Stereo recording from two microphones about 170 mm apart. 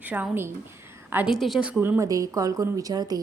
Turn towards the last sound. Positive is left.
turn(degrees=-20)  # may be behind; listen again after turning